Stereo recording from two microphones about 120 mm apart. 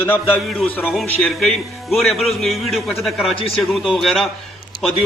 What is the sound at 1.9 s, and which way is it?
A man's voice, centre (ahead or behind).